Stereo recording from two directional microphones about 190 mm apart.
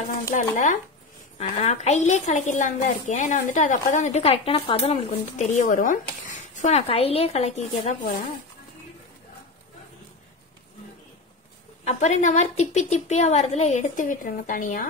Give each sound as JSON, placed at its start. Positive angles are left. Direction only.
{"t": 0.3, "sound": "a woman's voice", "side_deg": 40}
{"t": 11.8, "sound": "a woman's voice", "side_deg": 35}